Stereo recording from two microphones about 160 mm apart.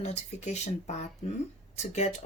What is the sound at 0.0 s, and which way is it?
A woman's voice, 45° left (ahead or behind).